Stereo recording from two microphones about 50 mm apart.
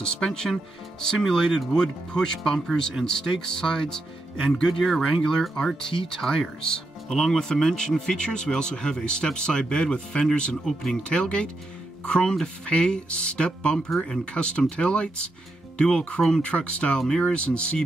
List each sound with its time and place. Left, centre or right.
0.0 s speech: centre
2.9 s speech: centre
3.3 s speech: centre
16.2 s speech: centre
16.4 s speech: left